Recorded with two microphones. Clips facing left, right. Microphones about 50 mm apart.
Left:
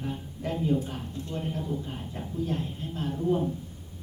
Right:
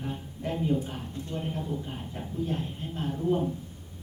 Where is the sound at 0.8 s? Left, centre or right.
Centre.